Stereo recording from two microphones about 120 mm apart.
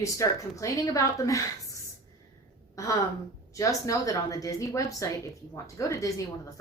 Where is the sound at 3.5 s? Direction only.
25° left (ahead or behind).